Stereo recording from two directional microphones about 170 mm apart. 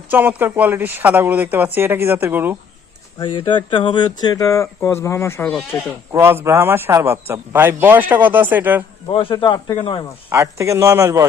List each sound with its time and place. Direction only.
0.1 s a man's voice: 10° right (ahead or behind)
3.2 s speech: 30° left (ahead or behind); by 5.8 s 10° left (ahead or behind)
6.1 s a man's voice: 15° right (ahead or behind)
9.0 s speech: 30° left (ahead or behind)
10.2 s a man's voice: 15° right (ahead or behind)